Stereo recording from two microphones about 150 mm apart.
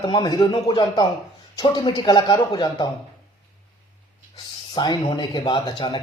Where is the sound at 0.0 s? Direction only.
30° left (ahead or behind).